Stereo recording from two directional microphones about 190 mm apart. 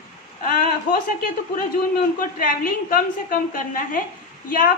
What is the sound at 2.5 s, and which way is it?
A woman's voice, 50° left (ahead or behind).